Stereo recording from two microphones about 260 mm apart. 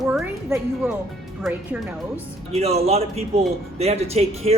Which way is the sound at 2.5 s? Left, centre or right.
Right.